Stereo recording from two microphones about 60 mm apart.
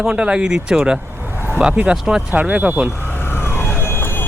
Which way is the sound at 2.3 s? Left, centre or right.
Right.